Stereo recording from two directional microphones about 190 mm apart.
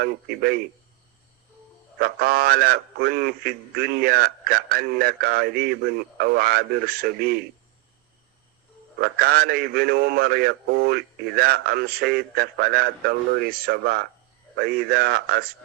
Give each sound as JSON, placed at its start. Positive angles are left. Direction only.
{"t": 0.0, "sound": "a man's voice", "side_deg": -55}
{"t": 2.0, "sound": "a man's voice", "side_deg": -55}
{"t": 9.0, "sound": "a man's voice", "side_deg": -55}